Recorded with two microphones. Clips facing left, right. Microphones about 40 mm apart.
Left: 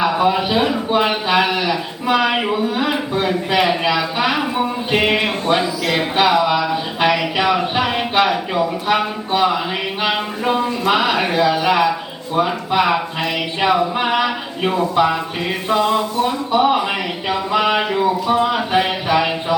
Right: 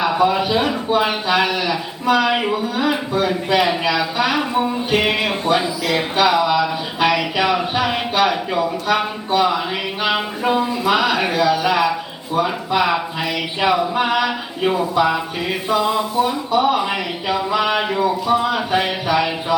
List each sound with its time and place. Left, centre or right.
0.0 s speech: centre
1.4 s speech: centre
9.3 s speech: centre
15.8 s a sound: centre
16.5 s speech: centre